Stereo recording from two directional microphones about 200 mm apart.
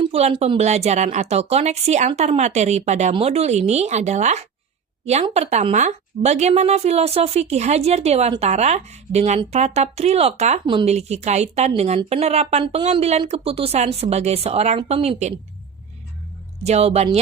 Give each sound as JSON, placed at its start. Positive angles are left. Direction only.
{"t": 0.0, "sound": "a woman's voice", "side_deg": -30}
{"t": 16.6, "sound": "a woman's voice", "side_deg": -30}